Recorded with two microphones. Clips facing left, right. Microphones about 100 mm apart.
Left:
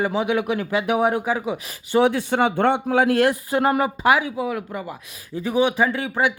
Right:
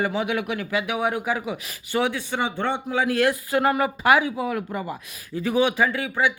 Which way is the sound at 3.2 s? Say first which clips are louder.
Left 2 dB; 25° left (ahead or behind).